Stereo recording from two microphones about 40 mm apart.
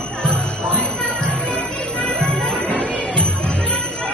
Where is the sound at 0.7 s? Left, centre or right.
Left.